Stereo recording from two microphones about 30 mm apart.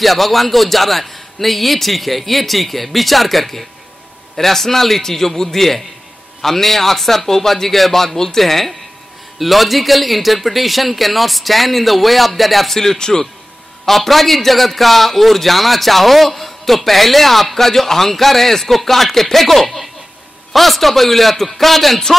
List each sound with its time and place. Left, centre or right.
0.0 s a man's voice: centre
13.8 s a man's voice: centre